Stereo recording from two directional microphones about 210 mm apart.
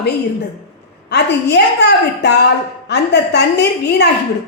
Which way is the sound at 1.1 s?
55° left (ahead or behind).